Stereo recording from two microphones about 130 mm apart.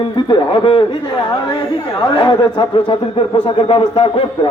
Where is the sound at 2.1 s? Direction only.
35° left (ahead or behind).